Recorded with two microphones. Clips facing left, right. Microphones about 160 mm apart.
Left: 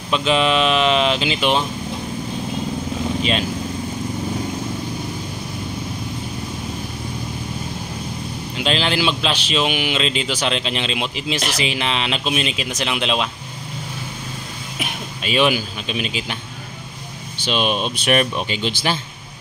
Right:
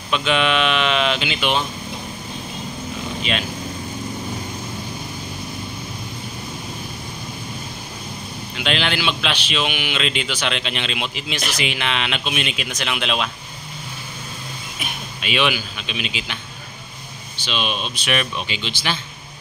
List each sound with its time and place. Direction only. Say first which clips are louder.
0.1 s speech: left 2 dB; 35° left (ahead or behind)
8.5 s speech: left 2 dB; 35° left (ahead or behind)
15.2 s speech: left 4 dB; 40° left (ahead or behind)
17.5 s speech: left 5 dB; 45° left (ahead or behind)